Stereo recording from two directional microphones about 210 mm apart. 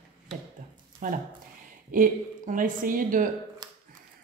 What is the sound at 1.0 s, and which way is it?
A woman's voice, 40° right (ahead or behind).